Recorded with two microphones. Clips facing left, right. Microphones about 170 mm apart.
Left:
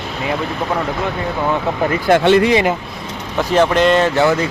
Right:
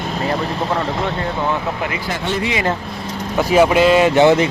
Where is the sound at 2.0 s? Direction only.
70° left (ahead or behind).